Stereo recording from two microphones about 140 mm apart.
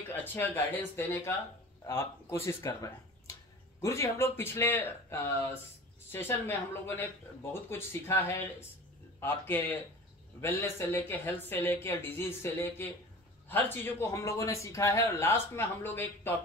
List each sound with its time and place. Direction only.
0.1 s a man's voice: 15° left (ahead or behind)
1.9 s a man's voice: 20° left (ahead or behind)